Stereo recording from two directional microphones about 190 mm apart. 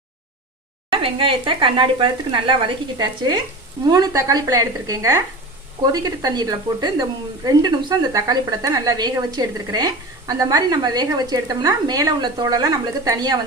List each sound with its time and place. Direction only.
0.9 s speech: 30° right (ahead or behind)